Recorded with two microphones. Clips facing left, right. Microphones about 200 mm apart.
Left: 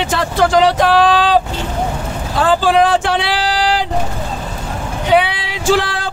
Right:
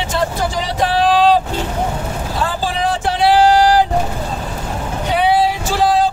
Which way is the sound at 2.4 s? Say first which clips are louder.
Left 9 dB; 90° left.